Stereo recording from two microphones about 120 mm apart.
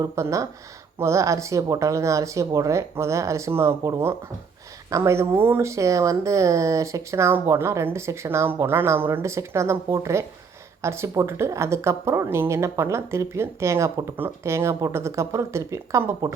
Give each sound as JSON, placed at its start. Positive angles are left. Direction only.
{"t": 0.0, "sound": "speech", "side_deg": -25}